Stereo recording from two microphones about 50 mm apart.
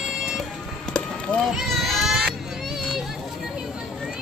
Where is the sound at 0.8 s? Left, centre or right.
Centre.